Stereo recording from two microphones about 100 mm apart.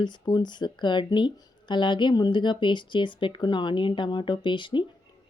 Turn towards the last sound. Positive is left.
turn(degrees=55)  # may be behind; listen again after turning